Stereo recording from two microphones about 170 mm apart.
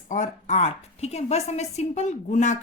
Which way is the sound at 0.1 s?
45° left (ahead or behind).